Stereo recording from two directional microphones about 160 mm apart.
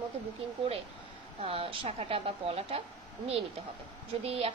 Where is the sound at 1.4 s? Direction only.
35° right (ahead or behind).